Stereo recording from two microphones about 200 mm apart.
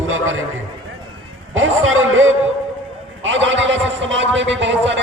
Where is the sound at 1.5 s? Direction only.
80° right.